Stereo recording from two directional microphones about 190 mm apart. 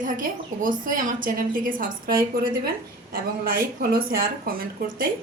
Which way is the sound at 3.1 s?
50° right (ahead or behind).